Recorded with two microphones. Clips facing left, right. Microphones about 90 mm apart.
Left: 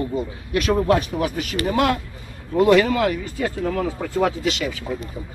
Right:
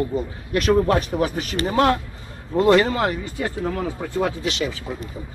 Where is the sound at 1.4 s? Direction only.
30° right (ahead or behind).